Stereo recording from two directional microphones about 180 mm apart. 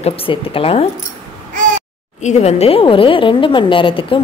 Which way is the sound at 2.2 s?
35° left (ahead or behind).